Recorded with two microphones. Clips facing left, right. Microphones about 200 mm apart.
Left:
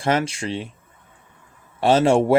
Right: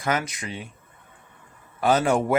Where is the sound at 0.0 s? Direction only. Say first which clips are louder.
Left 5 dB; 30° left (ahead or behind).